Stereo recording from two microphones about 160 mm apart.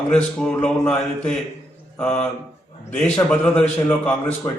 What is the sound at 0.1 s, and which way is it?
A man's voice, 5° left (ahead or behind).